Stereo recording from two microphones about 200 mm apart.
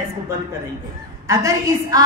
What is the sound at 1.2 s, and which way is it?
Speech, 15° right (ahead or behind).